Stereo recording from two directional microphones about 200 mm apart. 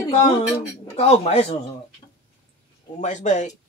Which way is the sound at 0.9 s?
30° left (ahead or behind).